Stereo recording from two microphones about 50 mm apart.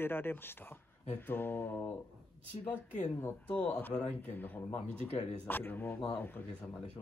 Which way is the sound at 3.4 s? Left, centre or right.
Left.